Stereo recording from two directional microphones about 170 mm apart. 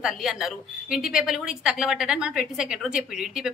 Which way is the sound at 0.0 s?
Centre (ahead or behind).